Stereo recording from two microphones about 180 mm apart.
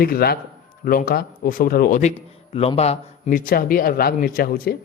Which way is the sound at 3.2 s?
50° left (ahead or behind).